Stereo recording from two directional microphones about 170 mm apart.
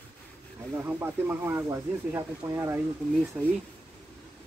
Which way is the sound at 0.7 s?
10° right (ahead or behind).